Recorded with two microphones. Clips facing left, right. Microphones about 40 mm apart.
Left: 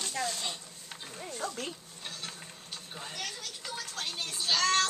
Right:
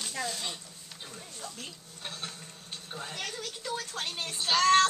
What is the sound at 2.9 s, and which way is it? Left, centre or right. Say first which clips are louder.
Speech: right 3 dB; centre.